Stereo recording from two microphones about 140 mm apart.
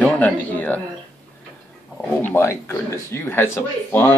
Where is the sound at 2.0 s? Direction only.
15° left (ahead or behind).